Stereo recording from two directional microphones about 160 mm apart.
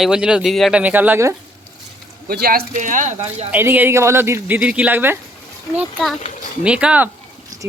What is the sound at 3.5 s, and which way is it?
Speech, 10° right (ahead or behind).